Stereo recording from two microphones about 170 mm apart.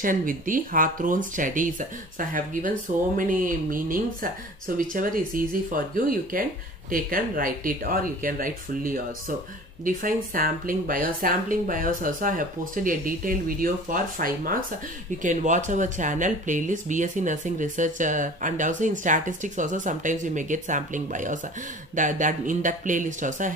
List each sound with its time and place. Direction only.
0.0 s speech: 55° right (ahead or behind)